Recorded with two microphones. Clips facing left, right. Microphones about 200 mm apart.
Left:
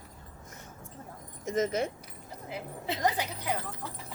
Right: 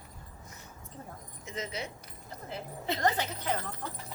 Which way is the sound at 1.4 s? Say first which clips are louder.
Left 10 dB; 45° left (ahead or behind).